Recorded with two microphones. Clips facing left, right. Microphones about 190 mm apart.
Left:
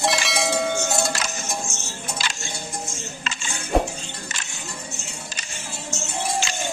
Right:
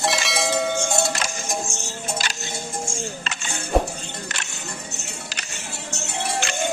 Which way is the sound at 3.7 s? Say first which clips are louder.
Even; centre (ahead or behind).